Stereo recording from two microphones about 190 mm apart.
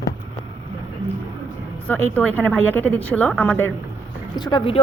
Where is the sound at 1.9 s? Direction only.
10° left (ahead or behind).